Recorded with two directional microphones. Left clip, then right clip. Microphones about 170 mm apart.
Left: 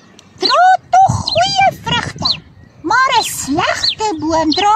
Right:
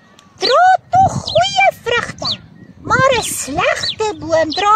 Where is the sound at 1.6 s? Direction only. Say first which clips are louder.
Even; 40° right (ahead or behind).